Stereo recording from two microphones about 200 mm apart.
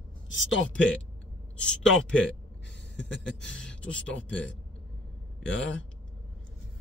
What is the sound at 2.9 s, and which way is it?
Speech, 65° left (ahead or behind).